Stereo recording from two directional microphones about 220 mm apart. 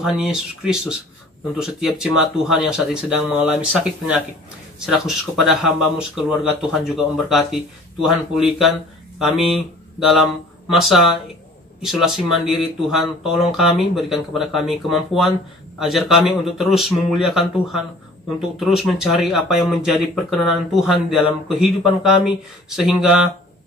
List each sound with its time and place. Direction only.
0.0 s speech: 5° right (ahead or behind)
4.7 s speech: centre (ahead or behind)